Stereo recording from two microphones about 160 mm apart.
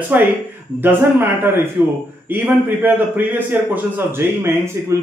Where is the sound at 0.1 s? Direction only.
10° right (ahead or behind).